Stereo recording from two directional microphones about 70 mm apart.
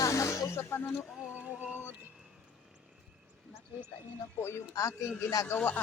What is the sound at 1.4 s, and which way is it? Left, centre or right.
Female singing, centre.